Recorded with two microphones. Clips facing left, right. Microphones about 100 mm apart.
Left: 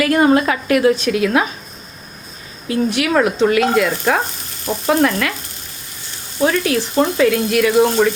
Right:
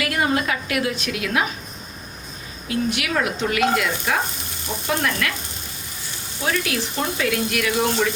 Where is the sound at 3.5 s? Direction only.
35° left (ahead or behind).